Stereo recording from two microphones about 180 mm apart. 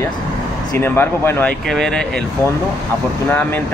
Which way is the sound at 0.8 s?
15° left (ahead or behind).